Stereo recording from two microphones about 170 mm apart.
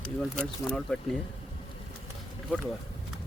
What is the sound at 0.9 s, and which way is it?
Speech, 5° left (ahead or behind).